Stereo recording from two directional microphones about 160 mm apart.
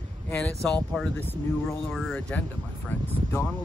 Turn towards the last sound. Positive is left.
turn(degrees=15)  # may be behind; listen again after turning